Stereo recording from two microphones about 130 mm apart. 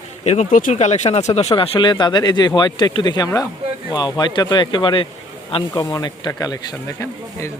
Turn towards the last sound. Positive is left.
turn(degrees=20)  # may be behind; listen again after turning